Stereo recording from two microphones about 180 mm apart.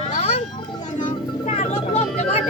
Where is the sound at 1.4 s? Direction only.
40° left (ahead or behind).